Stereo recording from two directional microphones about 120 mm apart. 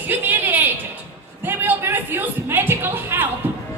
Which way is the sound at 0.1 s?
15° right (ahead or behind).